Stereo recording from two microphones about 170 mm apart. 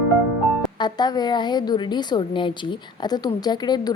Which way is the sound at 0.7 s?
25° left (ahead or behind).